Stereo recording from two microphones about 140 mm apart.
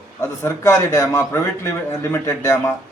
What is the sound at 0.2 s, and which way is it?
A man's voice, 20° left (ahead or behind).